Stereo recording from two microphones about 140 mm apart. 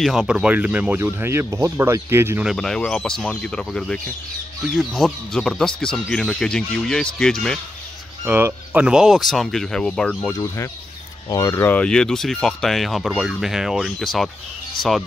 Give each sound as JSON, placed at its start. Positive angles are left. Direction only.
{"t": 0.0, "sound": "speech", "side_deg": -5}
{"t": 2.4, "sound": "speech", "side_deg": 5}
{"t": 8.3, "sound": "speech", "side_deg": -15}
{"t": 10.3, "sound": "speech", "side_deg": 20}